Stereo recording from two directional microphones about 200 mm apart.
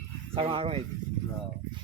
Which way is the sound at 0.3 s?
30° right (ahead or behind).